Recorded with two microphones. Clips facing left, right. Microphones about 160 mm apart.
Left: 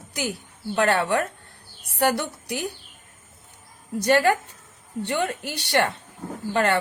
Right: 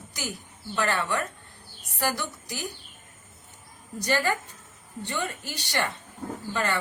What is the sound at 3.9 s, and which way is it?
Speech, 80° left.